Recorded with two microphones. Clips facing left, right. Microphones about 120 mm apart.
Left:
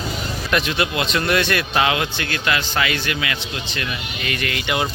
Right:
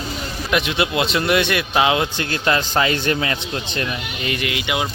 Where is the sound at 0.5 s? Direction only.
20° right (ahead or behind).